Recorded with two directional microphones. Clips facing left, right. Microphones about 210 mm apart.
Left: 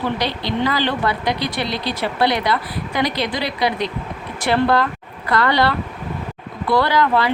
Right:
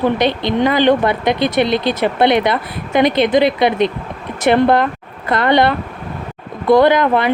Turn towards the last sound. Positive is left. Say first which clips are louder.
# right 5 dB
turn(degrees=-20)  # may be behind; listen again after turning